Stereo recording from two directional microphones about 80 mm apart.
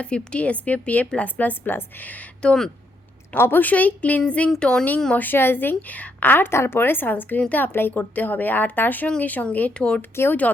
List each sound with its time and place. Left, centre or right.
0.0 s a woman's voice: centre
3.3 s a woman's voice: left; by 4.9 s centre
5.1 s a woman's voice: left